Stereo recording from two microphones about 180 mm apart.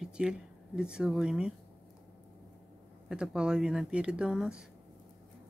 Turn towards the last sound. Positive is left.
turn(degrees=-5)  # may be behind; listen again after turning